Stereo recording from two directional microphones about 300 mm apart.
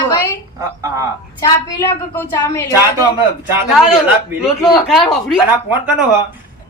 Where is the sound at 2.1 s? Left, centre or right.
Centre.